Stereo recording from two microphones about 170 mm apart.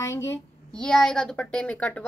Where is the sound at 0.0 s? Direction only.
15° left (ahead or behind).